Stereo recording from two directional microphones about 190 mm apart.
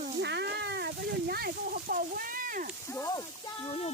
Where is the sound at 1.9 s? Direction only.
50° right (ahead or behind).